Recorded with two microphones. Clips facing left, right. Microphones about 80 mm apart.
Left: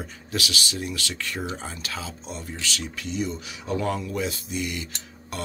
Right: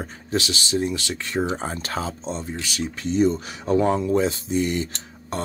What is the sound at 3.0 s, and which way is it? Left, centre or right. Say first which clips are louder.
Speech: right 11 dB; right.